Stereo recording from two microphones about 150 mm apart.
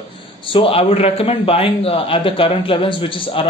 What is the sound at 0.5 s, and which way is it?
Speech, 35° left (ahead or behind).